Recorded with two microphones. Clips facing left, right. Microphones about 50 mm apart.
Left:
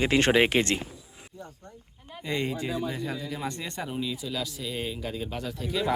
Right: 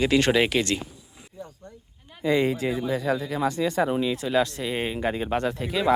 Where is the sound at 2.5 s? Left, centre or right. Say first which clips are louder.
Right 5 dB; right.